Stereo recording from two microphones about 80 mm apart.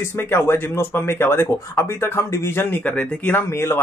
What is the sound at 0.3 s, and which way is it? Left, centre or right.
Speech, left.